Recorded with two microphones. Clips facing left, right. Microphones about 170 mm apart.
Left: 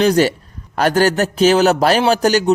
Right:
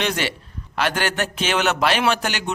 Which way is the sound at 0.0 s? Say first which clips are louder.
Left 11 dB; 40° left (ahead or behind).